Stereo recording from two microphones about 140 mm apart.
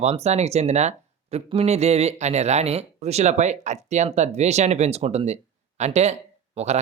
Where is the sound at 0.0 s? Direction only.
50° right (ahead or behind).